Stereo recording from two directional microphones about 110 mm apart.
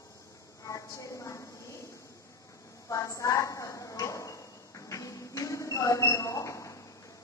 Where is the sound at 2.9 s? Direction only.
30° left (ahead or behind).